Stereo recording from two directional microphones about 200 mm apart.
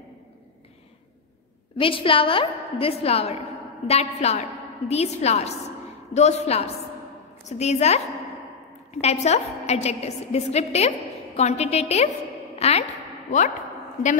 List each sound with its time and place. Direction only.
1.8 s a woman's voice: 25° left (ahead or behind)
9.0 s a woman's voice: 35° left (ahead or behind)
12.5 s a sound: 30° left (ahead or behind)